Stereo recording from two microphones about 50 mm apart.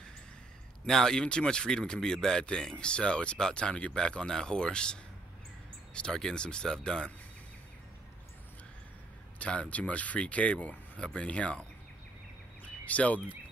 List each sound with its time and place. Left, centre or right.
0.8 s speech: centre
6.0 s speech: centre
9.4 s speech: left
12.8 s speech: left